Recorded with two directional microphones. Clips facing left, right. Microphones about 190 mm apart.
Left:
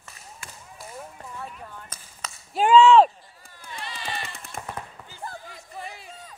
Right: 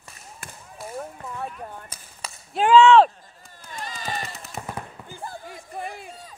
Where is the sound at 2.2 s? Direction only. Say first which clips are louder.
Right 1 dB; 10° right (ahead or behind).